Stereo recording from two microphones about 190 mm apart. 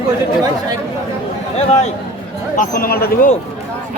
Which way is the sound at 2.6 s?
50° left (ahead or behind).